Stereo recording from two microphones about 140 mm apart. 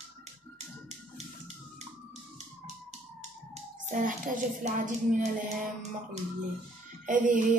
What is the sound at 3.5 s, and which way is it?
Speech, 70° right (ahead or behind).